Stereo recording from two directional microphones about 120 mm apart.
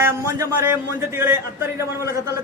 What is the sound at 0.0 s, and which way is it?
A man's voice, 20° right (ahead or behind).